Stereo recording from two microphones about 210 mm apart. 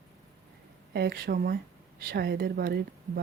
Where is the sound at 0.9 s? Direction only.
50° right (ahead or behind).